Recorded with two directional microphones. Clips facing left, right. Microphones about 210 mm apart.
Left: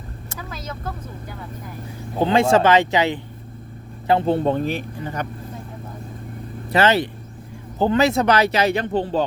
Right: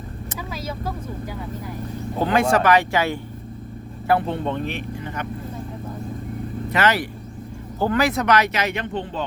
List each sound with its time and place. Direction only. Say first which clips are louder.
0.3 s vehicle: right 2 dB; 10° right (ahead or behind)
2.2 s speech: left 3 dB; 25° left (ahead or behind)
4.3 s speech: left 6 dB; 40° left (ahead or behind)
6.7 s speech: left 4 dB; 30° left (ahead or behind)